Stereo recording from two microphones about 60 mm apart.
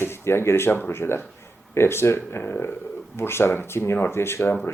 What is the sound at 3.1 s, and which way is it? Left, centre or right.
Speech, left.